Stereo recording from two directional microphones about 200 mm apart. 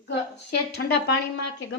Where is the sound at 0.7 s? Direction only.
55° left (ahead or behind).